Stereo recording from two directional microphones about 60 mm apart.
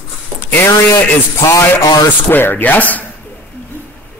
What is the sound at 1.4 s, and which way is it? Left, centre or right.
Speech, left.